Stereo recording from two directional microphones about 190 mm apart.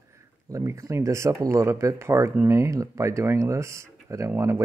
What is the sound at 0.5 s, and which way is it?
Speech, 15° right (ahead or behind).